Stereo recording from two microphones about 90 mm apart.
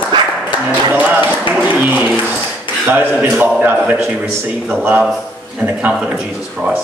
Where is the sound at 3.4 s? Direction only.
20° right (ahead or behind).